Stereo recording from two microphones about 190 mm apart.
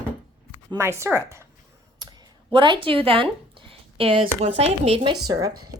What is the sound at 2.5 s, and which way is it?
Speech, 25° right (ahead or behind).